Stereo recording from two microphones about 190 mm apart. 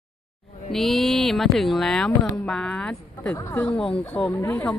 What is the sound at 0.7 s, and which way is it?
Speech, centre (ahead or behind).